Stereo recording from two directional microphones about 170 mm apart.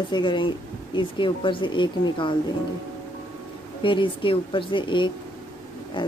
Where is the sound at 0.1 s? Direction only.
25° left (ahead or behind).